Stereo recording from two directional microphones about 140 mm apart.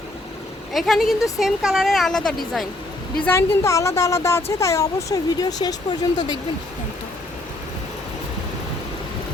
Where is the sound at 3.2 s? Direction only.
15° left (ahead or behind).